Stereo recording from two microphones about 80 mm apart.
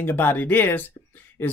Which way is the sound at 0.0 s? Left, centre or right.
Left.